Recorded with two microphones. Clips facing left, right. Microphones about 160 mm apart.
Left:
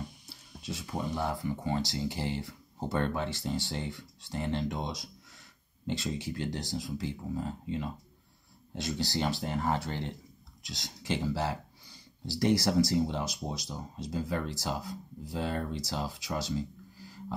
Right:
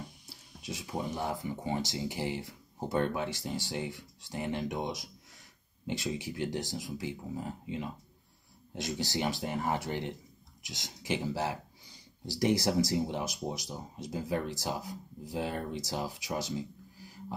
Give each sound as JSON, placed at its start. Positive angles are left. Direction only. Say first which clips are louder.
{"t": 0.7, "sound": "speech", "louder": "left 1 dB", "side_deg": -15}